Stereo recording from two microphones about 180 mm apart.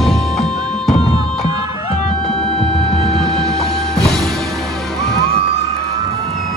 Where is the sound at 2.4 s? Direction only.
35° left (ahead or behind).